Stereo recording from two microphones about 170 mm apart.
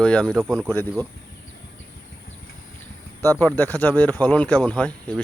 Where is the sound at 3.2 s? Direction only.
15° left (ahead or behind).